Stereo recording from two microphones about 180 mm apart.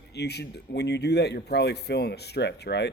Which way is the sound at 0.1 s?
65° left (ahead or behind).